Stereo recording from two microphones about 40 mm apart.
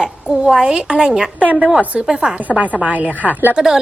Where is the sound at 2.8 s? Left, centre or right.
Right.